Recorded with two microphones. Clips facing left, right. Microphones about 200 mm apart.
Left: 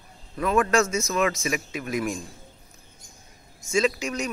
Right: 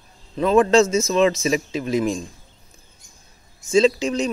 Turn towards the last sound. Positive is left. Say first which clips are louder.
# right 7 dB
turn(degrees=-30)  # may be behind; listen again after turning